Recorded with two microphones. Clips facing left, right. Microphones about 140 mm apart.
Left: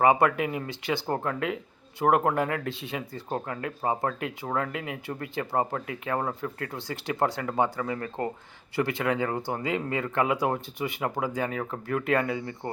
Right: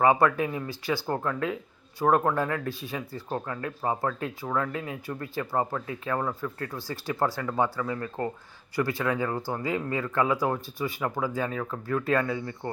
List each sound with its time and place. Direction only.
0.0 s speech: 20° left (ahead or behind)
8.7 s speech: 20° left (ahead or behind)